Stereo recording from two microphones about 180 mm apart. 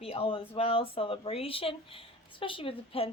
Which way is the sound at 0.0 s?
30° left (ahead or behind).